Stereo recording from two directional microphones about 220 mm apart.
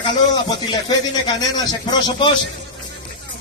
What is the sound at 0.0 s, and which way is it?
Speech, 20° left (ahead or behind).